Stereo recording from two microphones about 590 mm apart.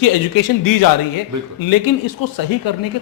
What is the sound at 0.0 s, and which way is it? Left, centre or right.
Speech, left.